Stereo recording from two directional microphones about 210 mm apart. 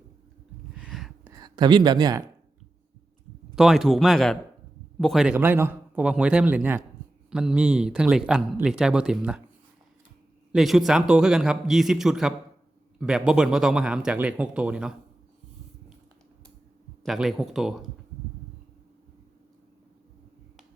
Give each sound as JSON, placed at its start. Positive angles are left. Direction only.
{"t": 0.8, "sound": "a sound", "side_deg": 0}
{"t": 1.3, "sound": "speech", "side_deg": -20}
{"t": 3.5, "sound": "a man's voice", "side_deg": 0}
{"t": 10.5, "sound": "speech", "side_deg": 0}
{"t": 17.0, "sound": "speech", "side_deg": 0}